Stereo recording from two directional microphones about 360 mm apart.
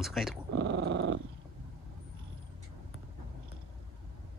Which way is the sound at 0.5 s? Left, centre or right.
Right.